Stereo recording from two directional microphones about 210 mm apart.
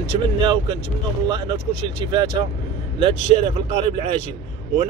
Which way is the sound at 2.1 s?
20° right (ahead or behind).